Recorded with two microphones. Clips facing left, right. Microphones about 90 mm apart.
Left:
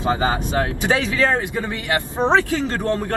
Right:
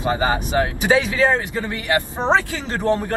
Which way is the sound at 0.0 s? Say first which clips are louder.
Even; 15° right (ahead or behind).